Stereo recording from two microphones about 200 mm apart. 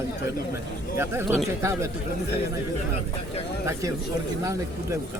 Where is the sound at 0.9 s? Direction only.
10° right (ahead or behind).